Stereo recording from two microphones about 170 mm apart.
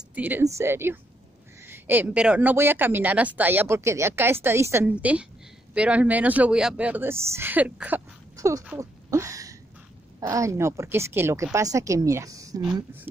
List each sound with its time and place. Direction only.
0.1 s speech: 10° right (ahead or behind)
8.6 s a sound: 15° right (ahead or behind)
10.2 s a woman's voice: 20° right (ahead or behind)